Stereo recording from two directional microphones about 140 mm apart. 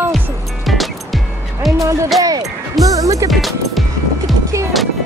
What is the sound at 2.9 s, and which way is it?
Music, 25° right (ahead or behind).